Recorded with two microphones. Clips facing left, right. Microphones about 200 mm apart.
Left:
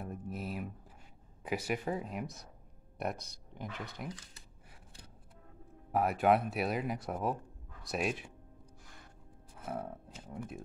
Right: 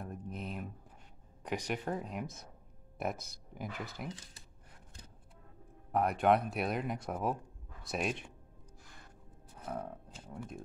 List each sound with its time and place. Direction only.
0.0 s a sound: 5° left (ahead or behind)
1.4 s speech: 5° left (ahead or behind)
5.9 s speech: 5° left (ahead or behind)
9.7 s speech: 5° left (ahead or behind)